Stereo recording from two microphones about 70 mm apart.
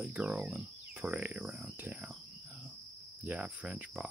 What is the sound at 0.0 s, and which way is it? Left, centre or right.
Speech, centre.